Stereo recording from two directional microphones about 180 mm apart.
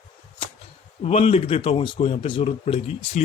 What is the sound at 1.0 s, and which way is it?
Speech, 35° left (ahead or behind).